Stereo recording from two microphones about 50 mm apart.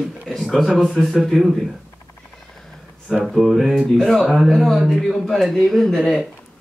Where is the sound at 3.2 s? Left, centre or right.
Centre.